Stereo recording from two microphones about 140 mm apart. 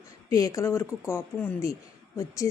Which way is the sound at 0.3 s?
25° left (ahead or behind).